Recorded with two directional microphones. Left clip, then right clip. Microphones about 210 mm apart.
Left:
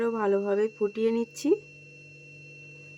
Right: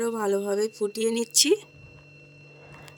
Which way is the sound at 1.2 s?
50° right (ahead or behind).